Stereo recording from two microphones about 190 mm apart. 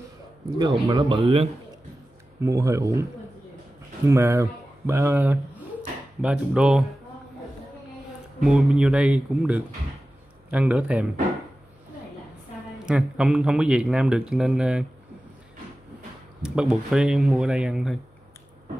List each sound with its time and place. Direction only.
0.6 s speech: 20° right (ahead or behind)
2.4 s speech: 15° right (ahead or behind)
8.5 s speech: centre (ahead or behind)
12.7 s speech: centre (ahead or behind)
16.4 s speech: 5° right (ahead or behind)